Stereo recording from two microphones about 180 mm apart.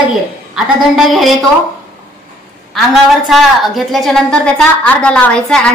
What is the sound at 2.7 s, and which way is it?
A woman's voice, centre (ahead or behind).